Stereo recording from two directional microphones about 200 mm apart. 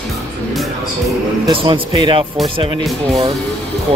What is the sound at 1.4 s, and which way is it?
A man's voice, 25° right (ahead or behind).